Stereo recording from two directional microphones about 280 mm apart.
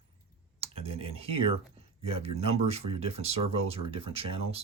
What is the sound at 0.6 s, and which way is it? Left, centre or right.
Speech, right.